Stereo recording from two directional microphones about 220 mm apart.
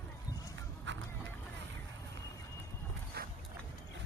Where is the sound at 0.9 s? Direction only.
55° right (ahead or behind).